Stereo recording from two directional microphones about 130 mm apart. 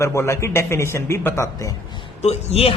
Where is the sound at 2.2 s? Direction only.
55° left (ahead or behind).